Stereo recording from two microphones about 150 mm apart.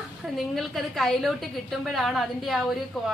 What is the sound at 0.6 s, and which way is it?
A woman's voice, centre (ahead or behind).